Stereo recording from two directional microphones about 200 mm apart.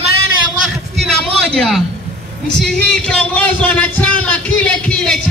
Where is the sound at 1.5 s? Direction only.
Centre (ahead or behind).